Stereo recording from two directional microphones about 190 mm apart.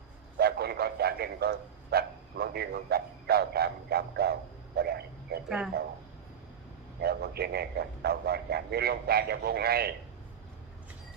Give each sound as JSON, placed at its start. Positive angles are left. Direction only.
{"t": 0.3, "sound": "a man's voice", "side_deg": -55}
{"t": 5.5, "sound": "speech", "side_deg": -5}
{"t": 7.0, "sound": "a man's voice", "side_deg": -55}